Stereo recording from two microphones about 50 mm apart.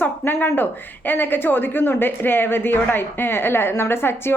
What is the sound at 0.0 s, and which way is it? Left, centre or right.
Speech, left.